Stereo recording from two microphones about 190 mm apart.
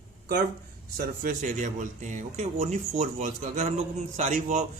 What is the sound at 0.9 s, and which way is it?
Speech, 45° right (ahead or behind).